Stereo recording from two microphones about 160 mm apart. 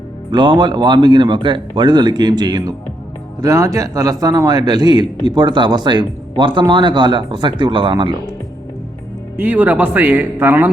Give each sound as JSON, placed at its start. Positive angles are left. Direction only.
{"t": 0.3, "sound": "a man's voice", "side_deg": -30}
{"t": 9.4, "sound": "speech", "side_deg": -10}